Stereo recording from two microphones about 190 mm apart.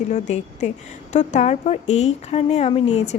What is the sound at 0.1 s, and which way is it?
Speech, 35° left (ahead or behind).